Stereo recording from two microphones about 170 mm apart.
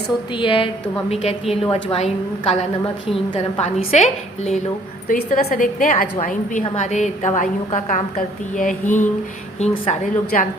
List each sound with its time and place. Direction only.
0.3 s a woman's voice: 30° left (ahead or behind)
5.0 s a woman's voice: 55° left (ahead or behind); by 10.4 s 40° left (ahead or behind)